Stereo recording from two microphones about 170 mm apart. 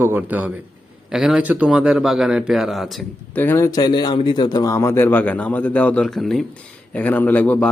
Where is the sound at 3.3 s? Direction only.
15° left (ahead or behind).